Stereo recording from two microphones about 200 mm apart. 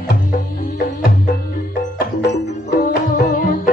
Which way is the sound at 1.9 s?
55° left (ahead or behind).